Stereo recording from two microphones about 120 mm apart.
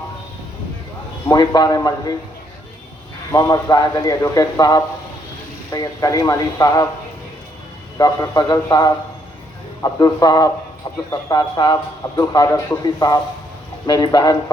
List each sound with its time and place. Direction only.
1.3 s speech: 35° left (ahead or behind)
3.3 s speech: 30° left (ahead or behind)
7.9 s speech: 30° left (ahead or behind)